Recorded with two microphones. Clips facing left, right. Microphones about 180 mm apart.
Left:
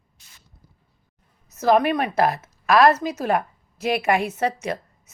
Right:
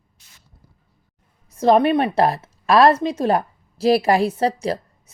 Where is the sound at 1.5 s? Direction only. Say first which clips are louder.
Right 3 dB; 30° right (ahead or behind).